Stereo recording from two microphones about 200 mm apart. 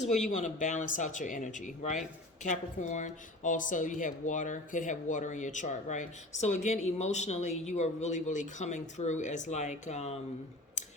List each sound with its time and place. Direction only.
0.3 s speech: 40° left (ahead or behind)